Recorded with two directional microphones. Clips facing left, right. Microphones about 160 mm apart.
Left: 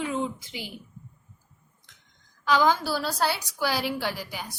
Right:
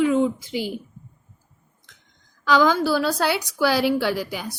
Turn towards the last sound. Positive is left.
turn(degrees=-90)